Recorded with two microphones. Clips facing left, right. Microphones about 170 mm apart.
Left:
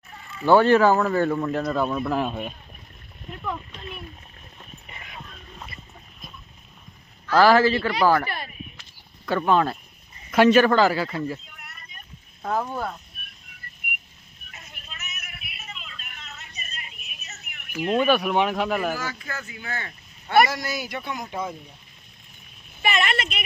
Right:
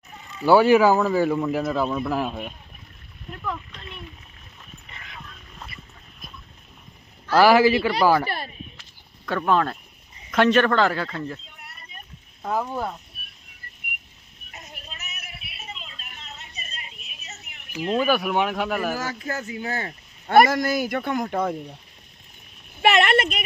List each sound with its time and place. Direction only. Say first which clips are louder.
0.1 s a sound: right 1 dB; 20° right (ahead or behind)
0.4 s speech: right 1 dB; 10° right (ahead or behind)
7.3 s a man's voice: right 1 dB; 10° right (ahead or behind)
9.2 s speech: left 1 dB; centre (ahead or behind)
11.4 s vehicle: right 1 dB; 30° right (ahead or behind)
12.4 s a man's voice: even; 5° right (ahead or behind)
14.5 s vehicle: right 4 dB; 40° right (ahead or behind)
17.9 s speech: left 1 dB; centre (ahead or behind)
18.9 s a man's voice: right 4 dB; 40° right (ahead or behind); by 21.5 s 55° right (ahead or behind)
22.8 s a woman's voice: right 6 dB; 70° right (ahead or behind); by 23.4 s 55° right (ahead or behind)